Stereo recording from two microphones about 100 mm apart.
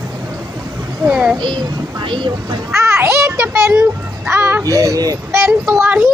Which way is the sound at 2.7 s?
25° right (ahead or behind).